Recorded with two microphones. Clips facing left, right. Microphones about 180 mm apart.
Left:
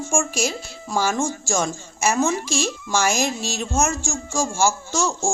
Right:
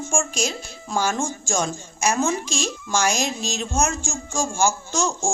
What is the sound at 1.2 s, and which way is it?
Speech, 20° right (ahead or behind).